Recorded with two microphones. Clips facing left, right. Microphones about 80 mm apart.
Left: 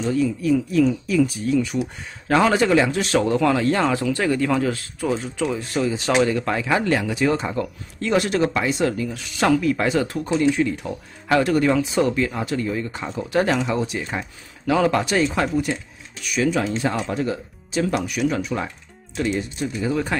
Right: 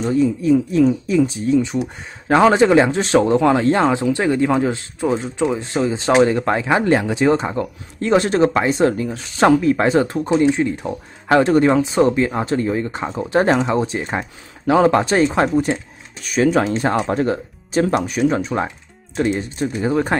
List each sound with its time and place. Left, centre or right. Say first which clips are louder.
0.0 s speech: right 4 dB; right